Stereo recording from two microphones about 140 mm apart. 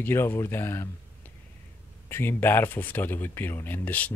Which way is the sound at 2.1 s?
15° left (ahead or behind).